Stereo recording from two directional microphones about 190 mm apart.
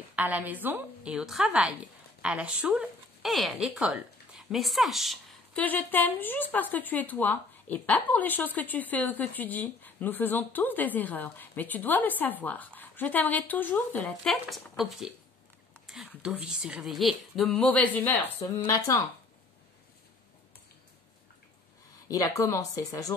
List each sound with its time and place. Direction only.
0.1 s a woman's voice: 10° right (ahead or behind)
16.2 s a woman's voice: 5° right (ahead or behind); by 19.0 s 15° left (ahead or behind)
22.0 s speech: 15° left (ahead or behind)